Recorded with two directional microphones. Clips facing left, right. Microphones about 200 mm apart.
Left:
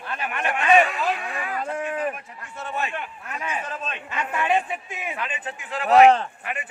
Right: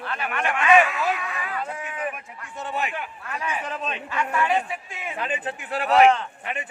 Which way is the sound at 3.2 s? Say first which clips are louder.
Right 2 dB; 20° left (ahead or behind).